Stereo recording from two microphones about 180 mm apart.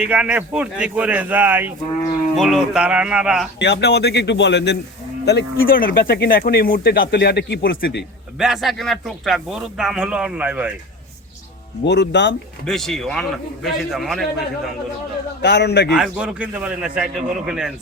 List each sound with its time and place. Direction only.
0.0 s a man's voice: 5° right (ahead or behind)
3.6 s speech: 70° left (ahead or behind)
8.4 s speech: centre (ahead or behind)
11.9 s speech: 75° left (ahead or behind)
12.6 s speech: 5° left (ahead or behind)
15.4 s speech: 70° left (ahead or behind)
15.9 s speech: 5° right (ahead or behind)